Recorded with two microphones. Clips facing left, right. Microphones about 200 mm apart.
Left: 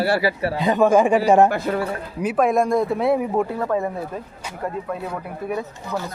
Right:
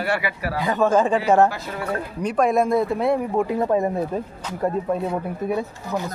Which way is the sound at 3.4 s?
20° right (ahead or behind).